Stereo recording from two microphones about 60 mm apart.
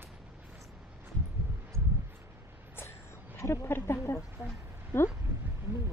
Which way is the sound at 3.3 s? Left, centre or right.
Left.